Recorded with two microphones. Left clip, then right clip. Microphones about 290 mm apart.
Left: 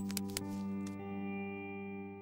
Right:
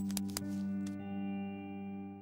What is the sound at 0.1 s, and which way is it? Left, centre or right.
Music, centre.